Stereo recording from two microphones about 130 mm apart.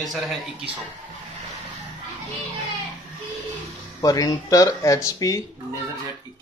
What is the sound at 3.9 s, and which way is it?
Speech, 30° left (ahead or behind).